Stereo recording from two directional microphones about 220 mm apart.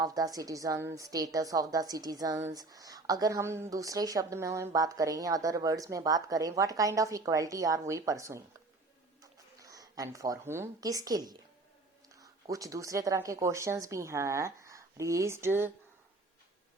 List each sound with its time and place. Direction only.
0.0 s a woman's voice: 15° right (ahead or behind)